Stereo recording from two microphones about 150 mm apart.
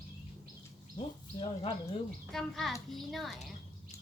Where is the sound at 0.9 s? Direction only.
35° left (ahead or behind).